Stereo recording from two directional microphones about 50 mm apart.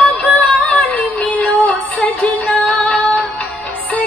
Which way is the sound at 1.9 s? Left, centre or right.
Centre.